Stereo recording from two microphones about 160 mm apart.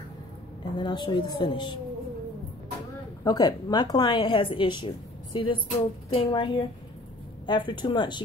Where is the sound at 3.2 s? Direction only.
25° left (ahead or behind).